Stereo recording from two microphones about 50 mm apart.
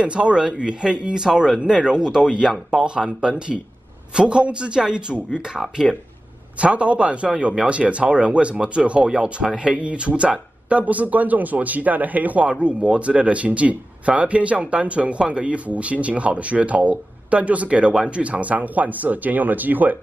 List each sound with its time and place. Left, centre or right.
0.0 s speech: right
5.9 s speech: centre
6.6 s speech: right